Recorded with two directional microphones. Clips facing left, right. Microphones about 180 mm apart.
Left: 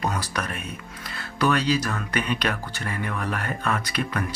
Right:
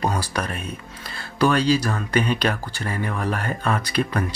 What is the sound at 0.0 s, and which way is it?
Speech, 30° right (ahead or behind).